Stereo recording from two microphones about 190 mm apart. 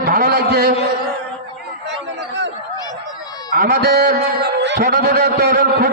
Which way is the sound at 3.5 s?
50° right (ahead or behind).